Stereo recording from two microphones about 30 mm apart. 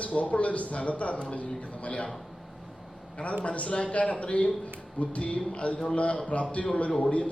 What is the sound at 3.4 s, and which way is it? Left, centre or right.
A woman's voice, left.